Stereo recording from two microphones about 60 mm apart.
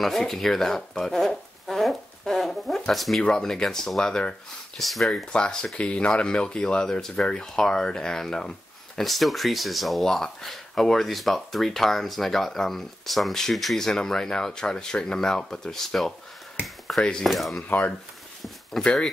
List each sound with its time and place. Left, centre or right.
0.0 s a sound: centre
3.2 s speech: centre
4.7 s speech: centre
5.1 s speech: centre
17.2 s speech: centre
17.6 s speech: left
18.4 s a sound: centre